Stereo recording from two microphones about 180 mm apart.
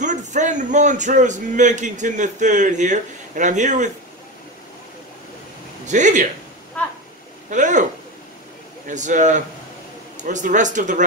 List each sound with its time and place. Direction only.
0.0 s a man's voice: 40° right (ahead or behind)
5.9 s speech: 45° right (ahead or behind)
7.4 s speech: 45° right (ahead or behind)
8.8 s speech: 45° right (ahead or behind)